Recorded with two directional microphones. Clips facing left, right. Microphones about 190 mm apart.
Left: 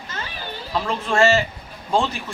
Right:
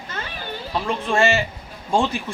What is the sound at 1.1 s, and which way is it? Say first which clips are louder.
Speech: left 2 dB; 15° right (ahead or behind).